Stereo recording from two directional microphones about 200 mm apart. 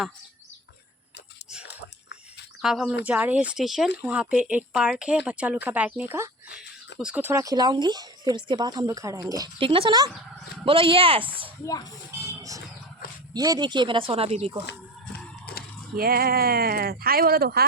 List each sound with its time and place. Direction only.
2.6 s speech: centre (ahead or behind); by 11.3 s 25° right (ahead or behind)
11.6 s speech: 20° left (ahead or behind)
12.4 s music: 15° right (ahead or behind)
13.3 s speech: 20° right (ahead or behind)
15.5 s a sound: 50° left (ahead or behind)
16.0 s speech: 50° right (ahead or behind)